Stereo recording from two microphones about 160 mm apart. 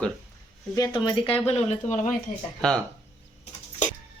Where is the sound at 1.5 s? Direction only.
45° left (ahead or behind).